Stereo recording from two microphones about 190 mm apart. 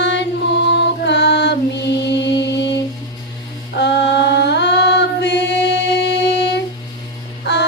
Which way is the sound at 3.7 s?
65° left (ahead or behind).